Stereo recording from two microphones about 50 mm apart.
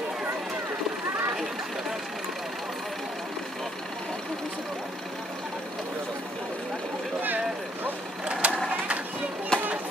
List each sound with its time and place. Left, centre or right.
7.2 s vehicle: right
8.3 s vehicle: right
9.5 s a sound: centre